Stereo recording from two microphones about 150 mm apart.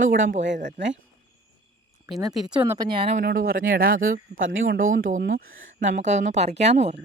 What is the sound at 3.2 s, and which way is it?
Speech, 80° right.